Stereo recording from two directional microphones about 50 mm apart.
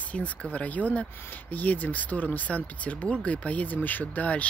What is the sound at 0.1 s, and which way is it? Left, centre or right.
Speech, left.